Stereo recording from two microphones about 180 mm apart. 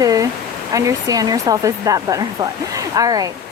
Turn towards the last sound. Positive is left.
turn(degrees=-20)  # may be behind; listen again after turning